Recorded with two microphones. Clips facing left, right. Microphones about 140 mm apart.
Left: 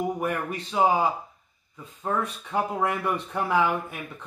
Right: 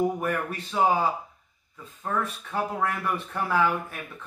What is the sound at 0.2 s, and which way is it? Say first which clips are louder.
Speech: even; 10° left (ahead or behind).